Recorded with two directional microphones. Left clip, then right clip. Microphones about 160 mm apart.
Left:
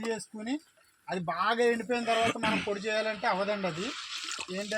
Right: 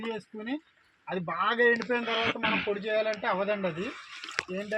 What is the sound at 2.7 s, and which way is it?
A man's voice, 35° left (ahead or behind).